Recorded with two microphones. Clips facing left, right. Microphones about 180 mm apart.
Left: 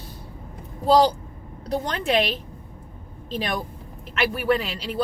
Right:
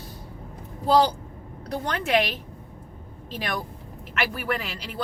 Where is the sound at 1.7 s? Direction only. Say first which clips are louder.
Left 2 dB; 20° left (ahead or behind).